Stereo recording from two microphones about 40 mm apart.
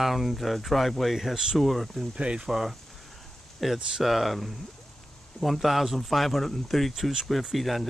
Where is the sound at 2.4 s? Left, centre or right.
Centre.